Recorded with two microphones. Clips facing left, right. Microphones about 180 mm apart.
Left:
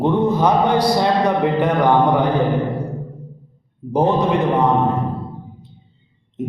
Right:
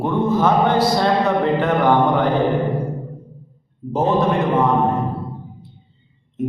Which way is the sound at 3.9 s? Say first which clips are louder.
Left 1 dB; 15° left (ahead or behind).